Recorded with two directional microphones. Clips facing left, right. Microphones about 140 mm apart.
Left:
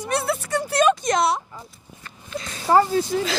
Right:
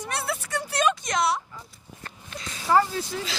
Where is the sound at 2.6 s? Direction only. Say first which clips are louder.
Left 4 dB; 35° left (ahead or behind).